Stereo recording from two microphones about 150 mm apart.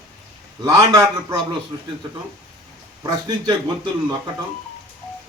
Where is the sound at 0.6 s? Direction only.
25° right (ahead or behind).